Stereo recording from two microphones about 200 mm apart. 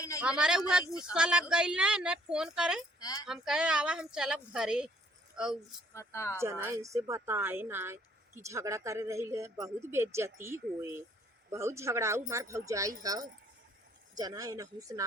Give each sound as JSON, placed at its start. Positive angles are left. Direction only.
{"t": 0.2, "sound": "speech", "side_deg": -5}
{"t": 3.0, "sound": "speech", "side_deg": 20}
{"t": 3.2, "sound": "speech", "side_deg": 0}
{"t": 5.9, "sound": "speech", "side_deg": 15}
{"t": 6.4, "sound": "a woman's voice", "side_deg": -15}